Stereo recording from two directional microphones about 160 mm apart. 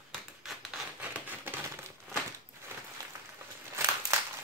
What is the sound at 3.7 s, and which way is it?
Crumpling, 20° right (ahead or behind).